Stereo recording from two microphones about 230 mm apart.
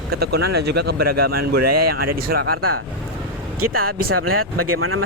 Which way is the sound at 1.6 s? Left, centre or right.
Right.